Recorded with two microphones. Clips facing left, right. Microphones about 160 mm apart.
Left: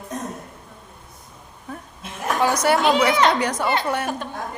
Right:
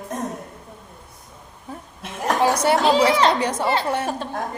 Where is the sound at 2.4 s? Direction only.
30° right (ahead or behind).